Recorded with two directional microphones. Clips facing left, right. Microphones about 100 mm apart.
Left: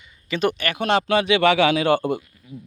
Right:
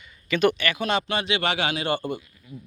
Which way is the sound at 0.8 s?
80° left.